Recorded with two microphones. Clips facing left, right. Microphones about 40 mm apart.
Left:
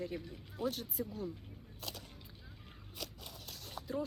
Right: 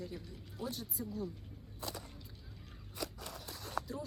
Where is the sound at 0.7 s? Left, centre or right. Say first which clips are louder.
Left 5 dB; left.